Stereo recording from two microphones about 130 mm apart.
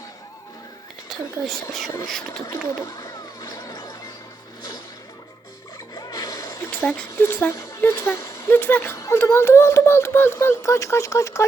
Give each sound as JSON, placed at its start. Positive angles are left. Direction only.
{"t": 1.1, "sound": "whispering", "side_deg": 0}
{"t": 2.5, "sound": "a sound", "side_deg": 25}
{"t": 5.9, "sound": "music", "side_deg": 30}
{"t": 6.7, "sound": "speech", "side_deg": 10}